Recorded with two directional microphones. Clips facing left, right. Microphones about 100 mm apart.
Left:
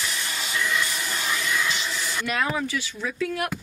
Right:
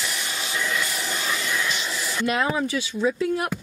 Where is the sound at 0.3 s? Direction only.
20° right (ahead or behind).